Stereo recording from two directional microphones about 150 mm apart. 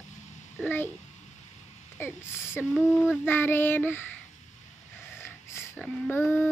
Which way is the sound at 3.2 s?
15° left (ahead or behind).